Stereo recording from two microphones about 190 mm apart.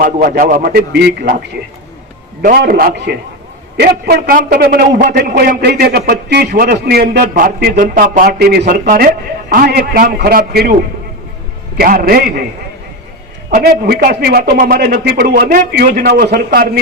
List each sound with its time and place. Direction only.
0.0 s a man's voice: 50° right (ahead or behind)
2.4 s a man's voice: 50° right (ahead or behind)
11.8 s a man's voice: 50° right (ahead or behind)
13.6 s a man's voice: 55° right (ahead or behind)